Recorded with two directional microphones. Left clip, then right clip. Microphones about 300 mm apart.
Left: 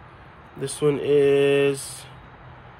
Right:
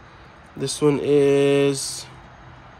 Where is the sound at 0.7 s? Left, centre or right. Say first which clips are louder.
Right 1 dB; right.